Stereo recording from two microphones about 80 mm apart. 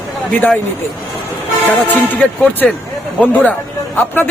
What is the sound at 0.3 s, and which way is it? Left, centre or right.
Speech, centre.